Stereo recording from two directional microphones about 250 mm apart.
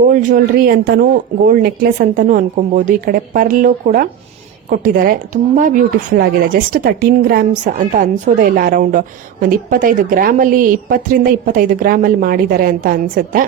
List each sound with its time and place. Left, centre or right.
0.0 s speech: right